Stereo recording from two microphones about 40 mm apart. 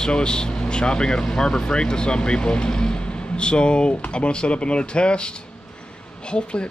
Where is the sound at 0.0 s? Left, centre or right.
Left.